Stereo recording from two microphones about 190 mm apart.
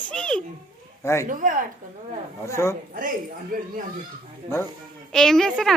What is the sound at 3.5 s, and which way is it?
Speech, 45° right (ahead or behind).